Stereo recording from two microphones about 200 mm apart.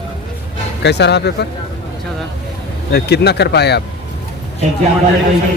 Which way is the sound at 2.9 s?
55° left (ahead or behind).